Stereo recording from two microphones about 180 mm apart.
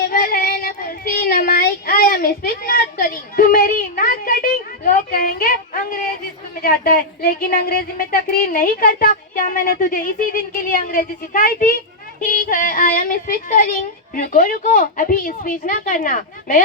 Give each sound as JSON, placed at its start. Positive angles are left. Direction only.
{"t": 0.1, "sound": "child singing", "side_deg": 55}
{"t": 6.6, "sound": "a woman's voice", "side_deg": 55}